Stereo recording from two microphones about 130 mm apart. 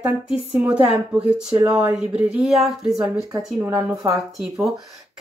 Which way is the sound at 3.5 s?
20° right (ahead or behind).